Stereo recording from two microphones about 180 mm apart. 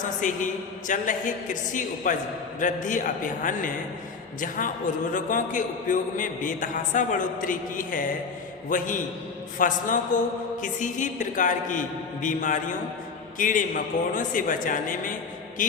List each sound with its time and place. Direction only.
0.9 s a man's voice: 45° left (ahead or behind)